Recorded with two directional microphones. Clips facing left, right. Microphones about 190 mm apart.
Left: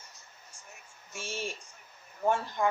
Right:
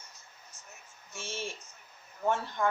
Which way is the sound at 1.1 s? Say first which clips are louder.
Left 2 dB; 15° left (ahead or behind).